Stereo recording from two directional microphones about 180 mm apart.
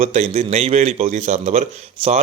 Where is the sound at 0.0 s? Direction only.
35° right (ahead or behind).